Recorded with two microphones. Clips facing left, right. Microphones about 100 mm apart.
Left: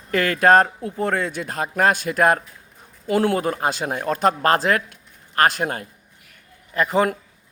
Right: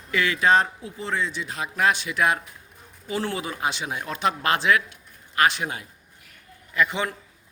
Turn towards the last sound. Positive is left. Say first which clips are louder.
# left 5 dB
turn(degrees=40)  # may be behind; listen again after turning